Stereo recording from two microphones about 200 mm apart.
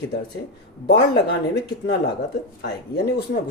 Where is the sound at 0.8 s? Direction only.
55° left (ahead or behind).